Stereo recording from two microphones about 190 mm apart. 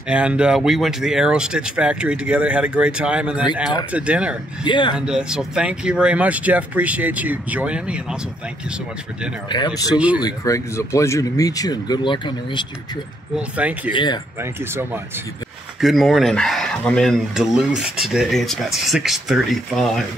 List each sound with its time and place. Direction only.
0.1 s speech: 5° right (ahead or behind)
4.6 s speech: 25° left (ahead or behind)
4.9 s speech: 5° right (ahead or behind)
9.9 s speech: 5° right (ahead or behind)
10.2 s speech: 15° left (ahead or behind)
13.4 s speech: 5° right (ahead or behind)
13.9 s speech: 25° left (ahead or behind)
14.4 s speech: 10° right (ahead or behind)
15.8 s speech: centre (ahead or behind)